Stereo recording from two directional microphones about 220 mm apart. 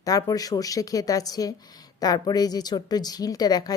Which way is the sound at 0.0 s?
15° left (ahead or behind).